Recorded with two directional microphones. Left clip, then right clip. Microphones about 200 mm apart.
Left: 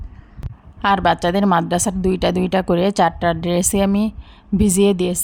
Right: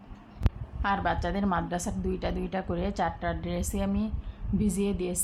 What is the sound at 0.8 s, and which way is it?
A woman's voice, 50° left (ahead or behind).